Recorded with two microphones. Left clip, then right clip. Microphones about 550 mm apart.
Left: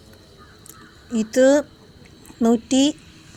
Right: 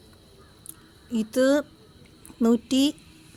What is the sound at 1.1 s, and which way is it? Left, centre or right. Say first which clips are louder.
Speech: left 6 dB; right.